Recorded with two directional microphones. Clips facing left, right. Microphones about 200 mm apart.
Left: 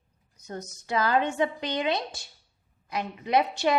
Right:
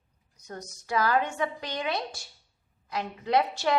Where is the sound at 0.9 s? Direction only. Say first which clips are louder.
Left 1 dB; 20° left (ahead or behind).